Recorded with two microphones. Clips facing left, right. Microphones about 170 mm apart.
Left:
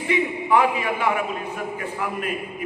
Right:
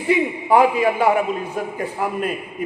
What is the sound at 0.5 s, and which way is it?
A man's voice, 35° right (ahead or behind).